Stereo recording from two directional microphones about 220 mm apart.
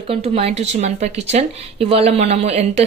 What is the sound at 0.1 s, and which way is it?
Speech, 25° right (ahead or behind).